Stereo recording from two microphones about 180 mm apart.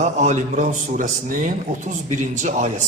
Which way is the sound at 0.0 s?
40° right (ahead or behind).